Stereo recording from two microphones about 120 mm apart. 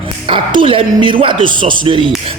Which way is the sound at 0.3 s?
45° right (ahead or behind).